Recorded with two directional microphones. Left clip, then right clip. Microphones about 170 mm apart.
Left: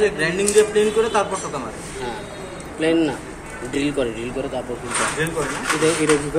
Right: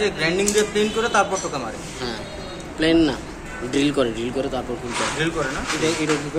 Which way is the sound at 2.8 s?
45° right (ahead or behind).